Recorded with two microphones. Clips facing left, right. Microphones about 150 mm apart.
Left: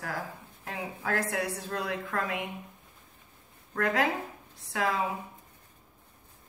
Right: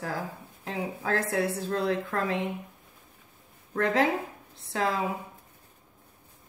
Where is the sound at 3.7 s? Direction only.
25° right (ahead or behind).